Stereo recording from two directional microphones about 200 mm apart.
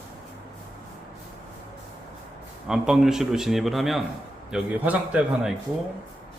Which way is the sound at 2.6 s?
5° right (ahead or behind).